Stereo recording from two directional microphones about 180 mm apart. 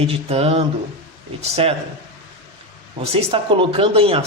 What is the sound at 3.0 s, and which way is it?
Speech, 30° right (ahead or behind).